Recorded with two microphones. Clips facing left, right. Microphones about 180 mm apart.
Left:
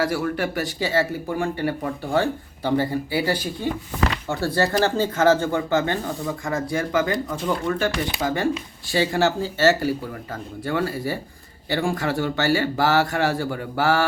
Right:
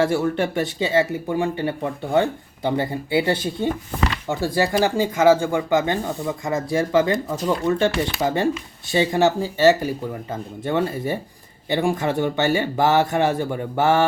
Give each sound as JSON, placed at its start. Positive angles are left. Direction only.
{"t": 0.0, "sound": "speech", "side_deg": -25}
{"t": 8.9, "sound": "speech", "side_deg": -20}